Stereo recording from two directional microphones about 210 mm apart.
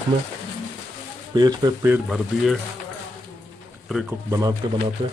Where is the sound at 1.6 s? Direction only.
10° right (ahead or behind).